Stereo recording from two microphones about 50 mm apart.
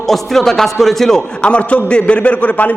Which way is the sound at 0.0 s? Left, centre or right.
Centre.